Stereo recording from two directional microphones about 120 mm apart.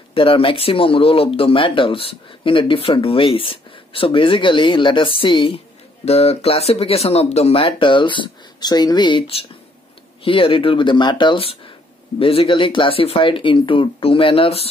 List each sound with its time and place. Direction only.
0.1 s speech: 50° left (ahead or behind)
6.0 s speech: 60° left (ahead or behind)